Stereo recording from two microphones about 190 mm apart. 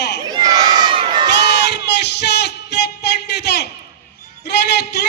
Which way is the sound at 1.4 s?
60° left (ahead or behind).